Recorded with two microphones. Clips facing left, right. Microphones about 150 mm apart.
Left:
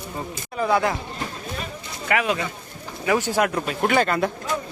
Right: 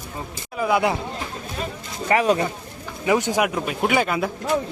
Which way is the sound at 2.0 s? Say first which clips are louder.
Right 4 dB; 35° right (ahead or behind).